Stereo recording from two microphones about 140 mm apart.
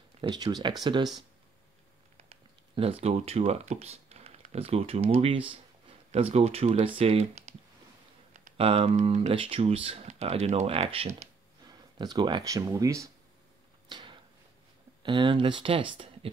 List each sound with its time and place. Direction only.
0.2 s speech: 30° right (ahead or behind)
2.2 s speech: 40° right (ahead or behind)
8.5 s speech: 45° right (ahead or behind)
12.0 s speech: 30° right (ahead or behind)
13.8 s a sound: 35° right (ahead or behind)
15.0 s speech: 35° right (ahead or behind)